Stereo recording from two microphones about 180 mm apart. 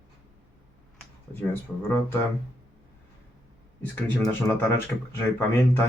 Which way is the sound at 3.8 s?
5° left (ahead or behind).